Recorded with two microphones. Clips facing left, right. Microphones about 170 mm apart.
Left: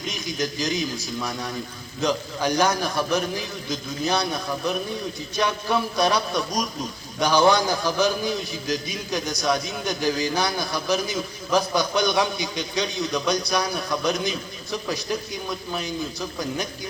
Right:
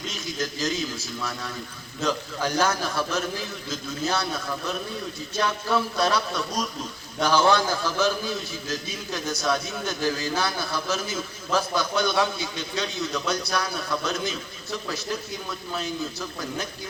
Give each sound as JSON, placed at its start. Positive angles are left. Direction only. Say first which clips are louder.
{"t": 0.1, "sound": "a man's voice", "louder": "left 5 dB", "side_deg": 15}